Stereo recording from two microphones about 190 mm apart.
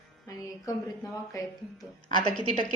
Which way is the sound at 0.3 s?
15° left (ahead or behind).